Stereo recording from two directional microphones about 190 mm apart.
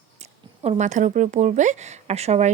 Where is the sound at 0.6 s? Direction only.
35° right (ahead or behind).